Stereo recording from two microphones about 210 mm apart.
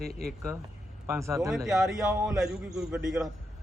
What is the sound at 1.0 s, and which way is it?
Speech, 15° right (ahead or behind).